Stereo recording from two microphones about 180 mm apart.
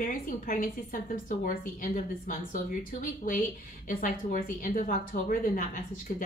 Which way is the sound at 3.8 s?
50° left (ahead or behind).